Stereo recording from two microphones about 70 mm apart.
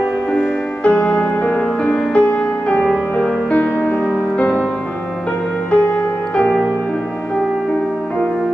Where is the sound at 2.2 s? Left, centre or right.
Left.